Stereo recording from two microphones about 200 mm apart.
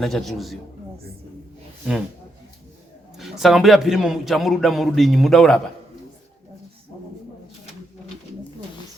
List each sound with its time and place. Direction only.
0.0 s a man's voice: centre (ahead or behind)
3.2 s a man's voice: centre (ahead or behind)